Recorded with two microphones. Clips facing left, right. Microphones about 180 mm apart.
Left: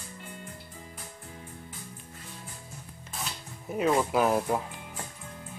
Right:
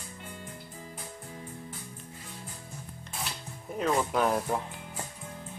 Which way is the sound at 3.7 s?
5° left (ahead or behind).